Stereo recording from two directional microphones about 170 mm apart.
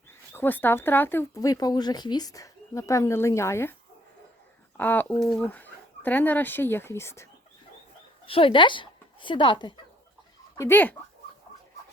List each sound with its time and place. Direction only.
0.3 s speech: 10° left (ahead or behind)
4.8 s speech: 10° left (ahead or behind)
8.3 s a woman's voice: 30° left (ahead or behind)
10.6 s speech: 10° left (ahead or behind)